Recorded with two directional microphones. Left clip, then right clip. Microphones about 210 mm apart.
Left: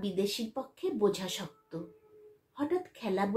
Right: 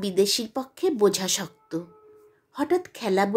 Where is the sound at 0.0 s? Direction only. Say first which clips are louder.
Right 10 dB; 50° right (ahead or behind).